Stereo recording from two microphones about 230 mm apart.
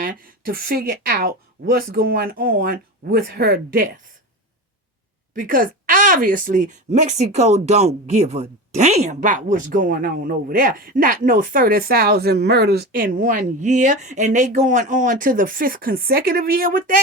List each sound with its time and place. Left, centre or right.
0.0 s speech: right
5.3 s speech: right